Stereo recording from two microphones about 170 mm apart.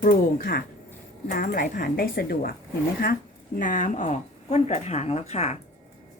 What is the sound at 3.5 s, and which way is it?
Speech, 50° left (ahead or behind).